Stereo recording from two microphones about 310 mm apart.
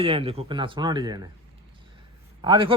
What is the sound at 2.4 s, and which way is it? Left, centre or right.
Speech, centre.